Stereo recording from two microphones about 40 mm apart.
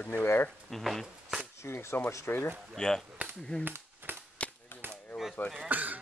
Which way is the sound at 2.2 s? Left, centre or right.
Left.